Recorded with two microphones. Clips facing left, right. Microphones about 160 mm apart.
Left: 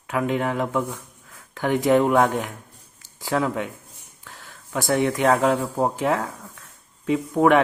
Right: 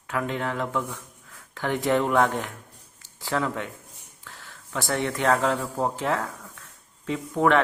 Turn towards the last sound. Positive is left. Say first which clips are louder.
# left 4 dB
turn(degrees=15)  # may be behind; listen again after turning